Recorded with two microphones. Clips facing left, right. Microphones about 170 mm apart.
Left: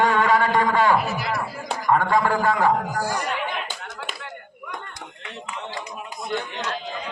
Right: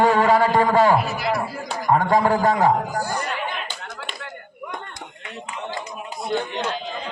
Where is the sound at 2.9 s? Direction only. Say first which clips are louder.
Even; 90° left.